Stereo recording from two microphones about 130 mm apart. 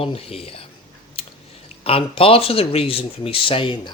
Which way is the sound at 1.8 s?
45° left (ahead or behind).